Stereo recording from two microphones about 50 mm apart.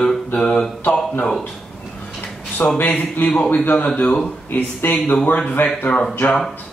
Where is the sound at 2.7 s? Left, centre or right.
Left.